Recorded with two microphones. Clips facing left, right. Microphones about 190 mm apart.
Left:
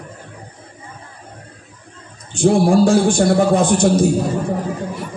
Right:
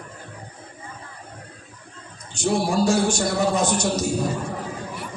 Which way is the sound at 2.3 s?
55° left (ahead or behind).